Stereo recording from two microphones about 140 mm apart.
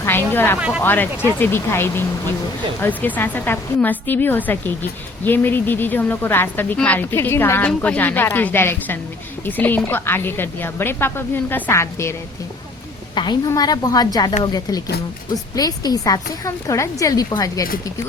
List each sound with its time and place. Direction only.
0.0 s a woman's voice: 15° left (ahead or behind)
13.1 s a woman's voice: 30° left (ahead or behind)